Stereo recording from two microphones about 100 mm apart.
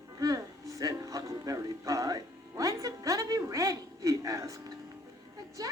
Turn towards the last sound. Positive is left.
turn(degrees=-40)  # may be behind; listen again after turning